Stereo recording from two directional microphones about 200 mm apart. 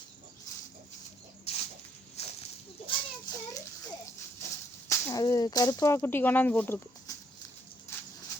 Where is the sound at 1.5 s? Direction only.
30° left (ahead or behind).